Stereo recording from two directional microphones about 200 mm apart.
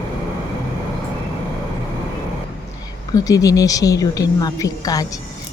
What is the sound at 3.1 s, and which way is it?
A woman's voice, 15° left (ahead or behind).